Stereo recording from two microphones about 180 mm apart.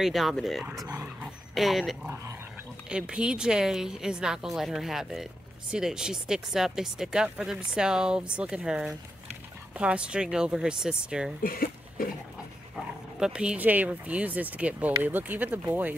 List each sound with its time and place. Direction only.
0.0 s a woman's voice: centre (ahead or behind)
0.8 s dog: 15° right (ahead or behind)
1.5 s a woman's voice: centre (ahead or behind)
11.4 s speech: 55° left (ahead or behind)
12.7 s speech: 5° right (ahead or behind)